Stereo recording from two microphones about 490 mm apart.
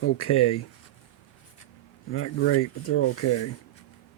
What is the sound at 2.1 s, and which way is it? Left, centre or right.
Speech, left.